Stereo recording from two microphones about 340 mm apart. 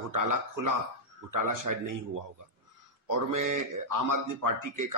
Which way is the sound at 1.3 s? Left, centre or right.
Right.